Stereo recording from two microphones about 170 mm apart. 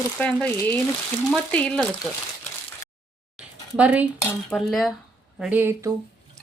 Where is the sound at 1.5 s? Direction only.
5° left (ahead or behind).